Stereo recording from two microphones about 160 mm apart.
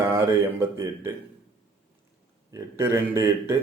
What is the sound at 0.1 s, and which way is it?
Speech, 15° right (ahead or behind).